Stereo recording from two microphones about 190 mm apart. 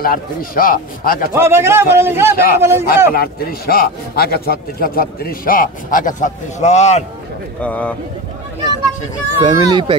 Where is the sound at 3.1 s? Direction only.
50° left (ahead or behind); by 7.1 s 35° left (ahead or behind).